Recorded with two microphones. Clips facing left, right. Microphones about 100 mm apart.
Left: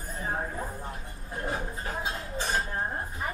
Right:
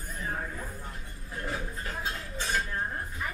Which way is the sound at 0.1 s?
30° left (ahead or behind).